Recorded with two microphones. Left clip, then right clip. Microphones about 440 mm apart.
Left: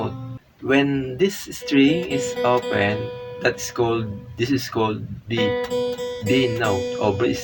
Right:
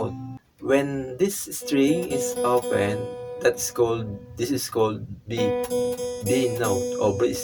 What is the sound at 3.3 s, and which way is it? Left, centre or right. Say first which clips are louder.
Speech: even; right.